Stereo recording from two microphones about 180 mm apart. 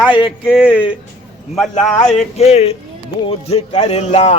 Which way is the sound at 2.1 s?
35° left (ahead or behind).